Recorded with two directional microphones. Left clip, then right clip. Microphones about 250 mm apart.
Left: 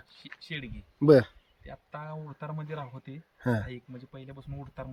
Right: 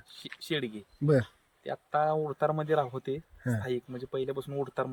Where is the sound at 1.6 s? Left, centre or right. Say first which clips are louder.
Right 14 dB; centre.